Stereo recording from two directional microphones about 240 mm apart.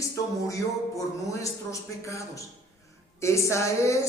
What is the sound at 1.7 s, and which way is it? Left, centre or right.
A woman's voice, centre.